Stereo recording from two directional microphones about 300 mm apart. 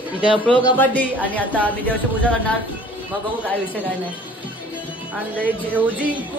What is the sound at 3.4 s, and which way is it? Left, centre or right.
Speech, centre.